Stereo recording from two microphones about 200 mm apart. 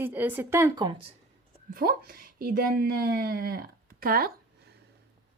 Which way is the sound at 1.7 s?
50° right (ahead or behind).